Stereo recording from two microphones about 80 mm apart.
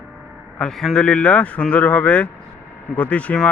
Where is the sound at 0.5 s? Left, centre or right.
Centre.